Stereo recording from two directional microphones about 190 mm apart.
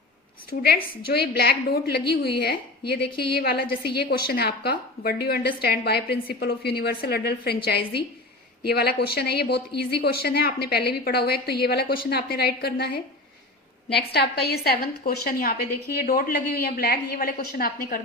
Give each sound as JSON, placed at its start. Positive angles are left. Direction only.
{"t": 0.5, "sound": "a woman's voice", "side_deg": 60}